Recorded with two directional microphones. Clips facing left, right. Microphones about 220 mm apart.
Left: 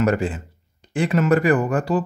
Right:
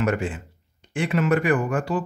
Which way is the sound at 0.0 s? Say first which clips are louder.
Left 4 dB; 35° left (ahead or behind).